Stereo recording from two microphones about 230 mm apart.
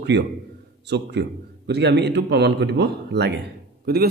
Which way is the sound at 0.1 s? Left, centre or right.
Right.